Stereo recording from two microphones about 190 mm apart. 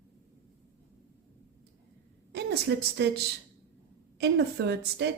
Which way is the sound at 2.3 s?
60° right (ahead or behind).